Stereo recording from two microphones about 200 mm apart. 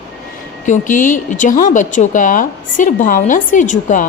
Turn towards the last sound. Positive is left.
turn(degrees=40)  # may be behind; listen again after turning